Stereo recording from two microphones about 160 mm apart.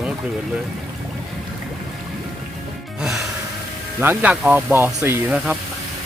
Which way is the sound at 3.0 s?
Centre (ahead or behind).